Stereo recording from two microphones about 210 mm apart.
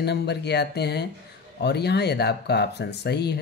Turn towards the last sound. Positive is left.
turn(degrees=50)  # may be behind; listen again after turning